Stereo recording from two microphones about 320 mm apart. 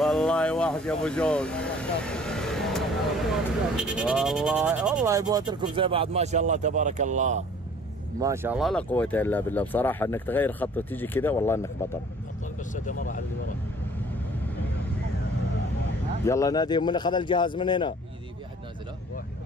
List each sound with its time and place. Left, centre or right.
0.0 s vehicle: centre
3.7 s speech: centre; by 7.4 s right
8.2 s speech: centre
12.7 s speech: left
16.3 s a man's voice: centre